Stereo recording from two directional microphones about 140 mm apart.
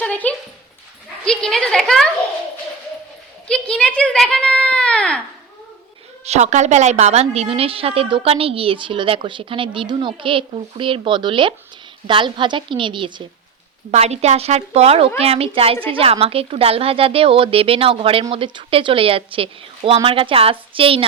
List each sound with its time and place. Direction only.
0.0 s a sound: 10° left (ahead or behind)
1.2 s a woman's voice: 5° left (ahead or behind)
3.4 s a child's voice: 5° left (ahead or behind)
6.2 s a woman's voice: 55° right (ahead or behind); by 13.2 s 35° right (ahead or behind)
13.9 s a woman's voice: 50° right (ahead or behind)